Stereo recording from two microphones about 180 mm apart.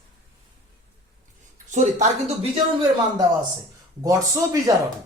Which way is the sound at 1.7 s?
40° right (ahead or behind).